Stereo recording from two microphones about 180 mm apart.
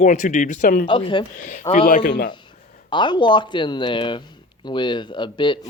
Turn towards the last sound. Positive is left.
turn(degrees=25)  # may be behind; listen again after turning